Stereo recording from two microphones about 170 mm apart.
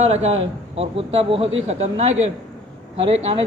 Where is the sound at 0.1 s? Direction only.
40° right (ahead or behind).